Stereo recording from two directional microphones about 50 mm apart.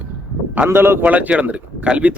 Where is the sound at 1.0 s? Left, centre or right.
Right.